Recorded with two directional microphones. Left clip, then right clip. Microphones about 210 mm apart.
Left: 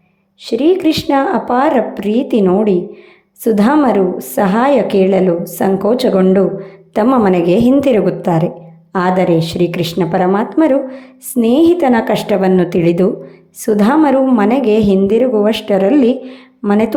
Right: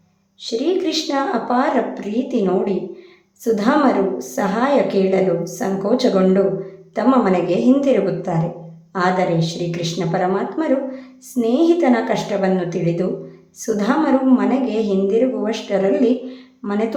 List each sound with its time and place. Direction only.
0.4 s a woman's voice: 35° left (ahead or behind)